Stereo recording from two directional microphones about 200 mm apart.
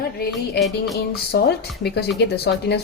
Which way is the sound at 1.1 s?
50° left (ahead or behind).